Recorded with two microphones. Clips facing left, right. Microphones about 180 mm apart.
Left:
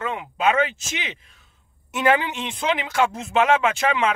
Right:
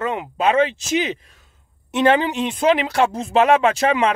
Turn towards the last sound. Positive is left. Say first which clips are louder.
# right 4 dB
turn(degrees=-35)  # may be behind; listen again after turning